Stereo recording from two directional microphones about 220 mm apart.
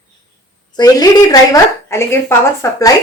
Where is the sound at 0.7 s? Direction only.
15° left (ahead or behind).